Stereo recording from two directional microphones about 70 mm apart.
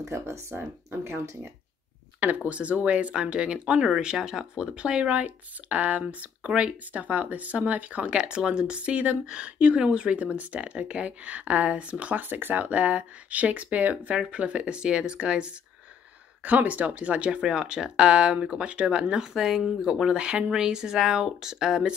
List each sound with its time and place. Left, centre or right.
0.0 s speech: right
2.1 s speech: right